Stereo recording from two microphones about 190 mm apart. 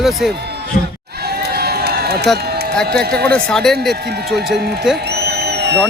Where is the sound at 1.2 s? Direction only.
55° right (ahead or behind).